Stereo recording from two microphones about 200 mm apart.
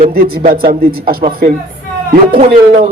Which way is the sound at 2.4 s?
30° right (ahead or behind).